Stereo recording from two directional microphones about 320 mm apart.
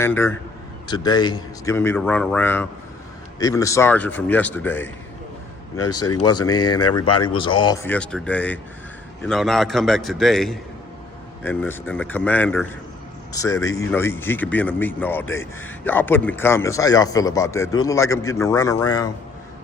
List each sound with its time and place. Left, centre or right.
0.0 s speech: centre
5.7 s speech: left
6.4 s speech: centre